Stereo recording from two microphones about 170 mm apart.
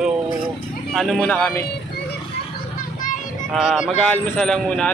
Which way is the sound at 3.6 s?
Centre (ahead or behind).